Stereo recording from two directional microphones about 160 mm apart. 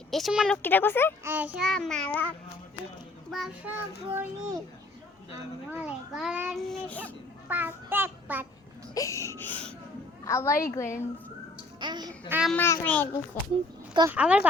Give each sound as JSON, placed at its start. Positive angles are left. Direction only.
{"t": 0.1, "sound": "speech", "side_deg": 0}
{"t": 1.2, "sound": "a child's voice", "side_deg": -15}
{"t": 1.5, "sound": "a child's voice", "side_deg": 0}
{"t": 3.3, "sound": "a child's voice", "side_deg": 0}
{"t": 4.1, "sound": "a child's voice", "side_deg": -15}
{"t": 5.7, "sound": "a child's voice", "side_deg": -5}
{"t": 7.4, "sound": "child singing", "side_deg": -10}
{"t": 9.0, "sound": "speech", "side_deg": 20}
{"t": 11.8, "sound": "a child's voice", "side_deg": -25}
{"t": 12.3, "sound": "a child's voice", "side_deg": -5}
{"t": 12.5, "sound": "speech", "side_deg": 15}
{"t": 14.1, "sound": "a child's voice", "side_deg": -10}